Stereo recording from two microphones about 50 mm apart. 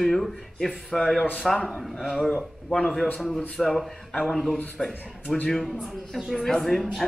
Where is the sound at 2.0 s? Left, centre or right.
Centre.